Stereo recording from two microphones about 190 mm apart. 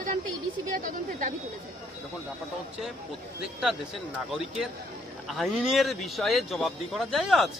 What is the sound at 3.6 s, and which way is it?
Speech, 5° right (ahead or behind).